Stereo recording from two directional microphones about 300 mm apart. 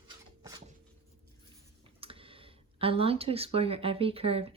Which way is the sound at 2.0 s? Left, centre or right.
Centre.